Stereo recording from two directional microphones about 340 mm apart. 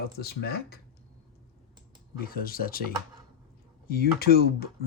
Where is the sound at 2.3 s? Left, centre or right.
Left.